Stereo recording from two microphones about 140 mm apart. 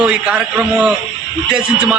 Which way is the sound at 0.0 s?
5° right (ahead or behind).